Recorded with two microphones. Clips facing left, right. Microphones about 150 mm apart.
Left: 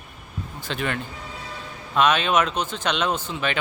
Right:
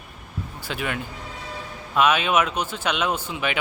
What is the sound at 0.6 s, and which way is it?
Speech, 10° right (ahead or behind).